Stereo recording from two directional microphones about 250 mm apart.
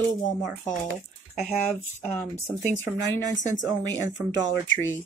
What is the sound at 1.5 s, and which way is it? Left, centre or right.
Speech, left.